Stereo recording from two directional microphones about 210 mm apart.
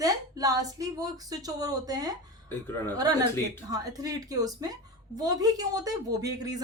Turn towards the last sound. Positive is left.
turn(degrees=-15)  # may be behind; listen again after turning